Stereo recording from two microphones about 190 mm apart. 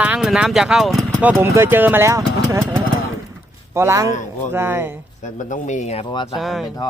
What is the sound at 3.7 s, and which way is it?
Speech, 15° right (ahead or behind).